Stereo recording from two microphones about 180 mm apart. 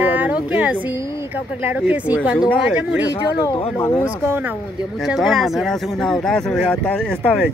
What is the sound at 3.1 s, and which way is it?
Speech, 20° left (ahead or behind).